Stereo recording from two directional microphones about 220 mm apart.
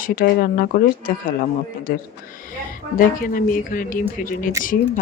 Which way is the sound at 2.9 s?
40° left (ahead or behind).